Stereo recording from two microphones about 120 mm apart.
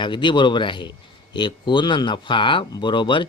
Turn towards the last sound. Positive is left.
turn(degrees=40)  # may be behind; listen again after turning